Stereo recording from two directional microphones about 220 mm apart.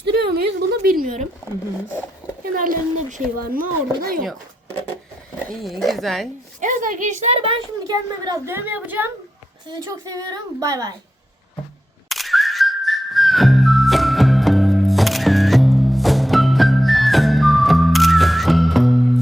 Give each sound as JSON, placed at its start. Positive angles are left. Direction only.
{"t": 0.7, "sound": "a woman's voice", "side_deg": -40}
{"t": 2.4, "sound": "speech", "side_deg": -40}
{"t": 5.6, "sound": "speech", "side_deg": 0}
{"t": 6.6, "sound": "a woman's voice", "side_deg": -35}
{"t": 12.0, "sound": "music", "side_deg": 0}